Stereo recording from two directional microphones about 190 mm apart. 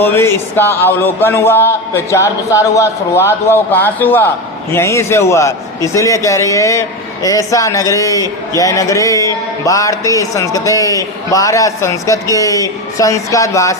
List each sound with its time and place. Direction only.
0.0 s a man's voice: 10° left (ahead or behind)